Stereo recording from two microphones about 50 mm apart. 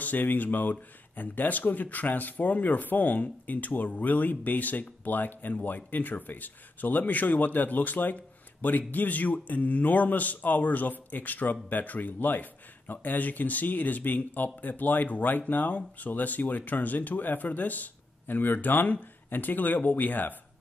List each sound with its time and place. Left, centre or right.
0.0 s speech: left